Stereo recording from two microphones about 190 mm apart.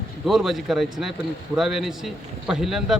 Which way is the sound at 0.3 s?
Centre (ahead or behind).